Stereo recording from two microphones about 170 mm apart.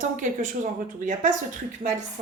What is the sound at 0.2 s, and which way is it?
Speech, 45° right (ahead or behind).